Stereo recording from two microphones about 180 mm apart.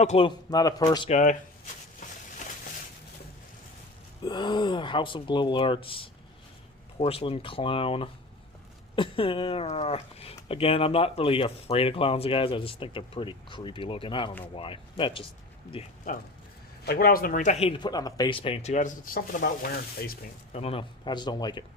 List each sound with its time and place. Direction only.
0.0 s speech: 35° left (ahead or behind)
1.1 s speech: 45° left (ahead or behind)
4.2 s speech: 25° left (ahead or behind)
16.8 s speech: 60° left (ahead or behind)
20.5 s speech: 35° left (ahead or behind)